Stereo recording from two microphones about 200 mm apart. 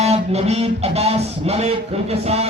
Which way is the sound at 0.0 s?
30° right (ahead or behind).